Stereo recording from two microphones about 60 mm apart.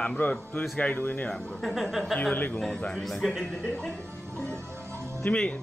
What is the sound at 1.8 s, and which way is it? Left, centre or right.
Speech, centre.